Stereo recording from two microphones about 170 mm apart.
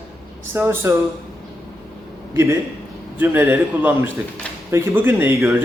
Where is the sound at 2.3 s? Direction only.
15° right (ahead or behind).